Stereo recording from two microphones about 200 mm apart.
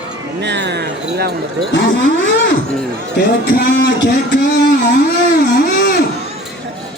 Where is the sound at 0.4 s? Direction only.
60° right (ahead or behind).